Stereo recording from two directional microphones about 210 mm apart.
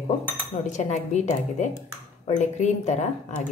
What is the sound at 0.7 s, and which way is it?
Speech, 35° left (ahead or behind).